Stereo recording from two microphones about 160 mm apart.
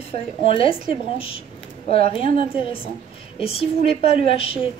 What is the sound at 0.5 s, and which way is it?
A woman's voice, 35° left (ahead or behind).